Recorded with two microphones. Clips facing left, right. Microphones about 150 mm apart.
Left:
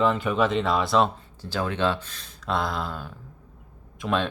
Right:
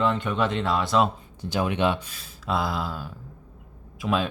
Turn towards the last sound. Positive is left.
turn(degrees=-5)  # may be behind; listen again after turning